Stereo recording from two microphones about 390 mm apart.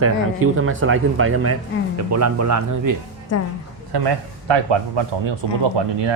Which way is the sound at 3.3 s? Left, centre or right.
Left.